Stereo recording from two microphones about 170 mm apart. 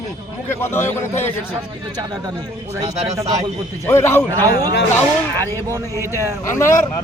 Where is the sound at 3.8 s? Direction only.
15° left (ahead or behind).